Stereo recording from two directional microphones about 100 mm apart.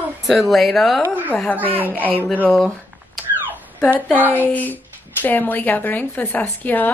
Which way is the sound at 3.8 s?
15° left (ahead or behind).